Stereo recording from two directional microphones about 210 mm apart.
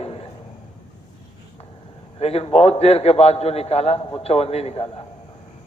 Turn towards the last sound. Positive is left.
turn(degrees=30)  # may be behind; listen again after turning